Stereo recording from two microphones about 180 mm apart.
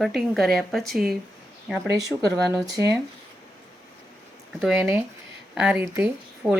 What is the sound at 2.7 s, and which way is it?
Speech, 15° right (ahead or behind).